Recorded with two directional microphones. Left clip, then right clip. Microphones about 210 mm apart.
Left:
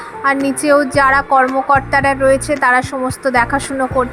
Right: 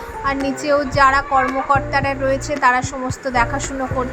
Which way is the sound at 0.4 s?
20° left (ahead or behind).